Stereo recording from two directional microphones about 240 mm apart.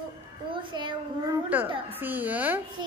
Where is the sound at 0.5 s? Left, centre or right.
Centre.